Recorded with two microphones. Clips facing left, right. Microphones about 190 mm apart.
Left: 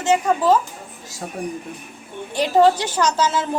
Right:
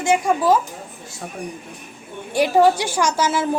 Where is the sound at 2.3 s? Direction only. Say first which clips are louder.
Even; 10° right (ahead or behind).